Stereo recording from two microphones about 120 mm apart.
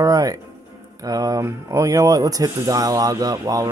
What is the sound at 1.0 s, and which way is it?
Speech, 30° right (ahead or behind).